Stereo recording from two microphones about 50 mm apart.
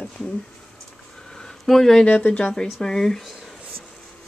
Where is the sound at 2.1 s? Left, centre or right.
Left.